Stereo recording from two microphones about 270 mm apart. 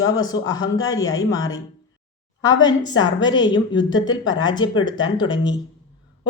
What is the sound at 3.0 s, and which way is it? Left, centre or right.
Speech, centre.